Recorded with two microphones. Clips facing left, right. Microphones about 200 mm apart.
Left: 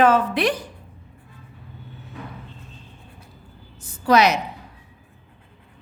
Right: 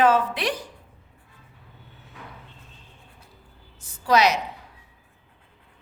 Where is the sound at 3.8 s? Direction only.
55° left (ahead or behind).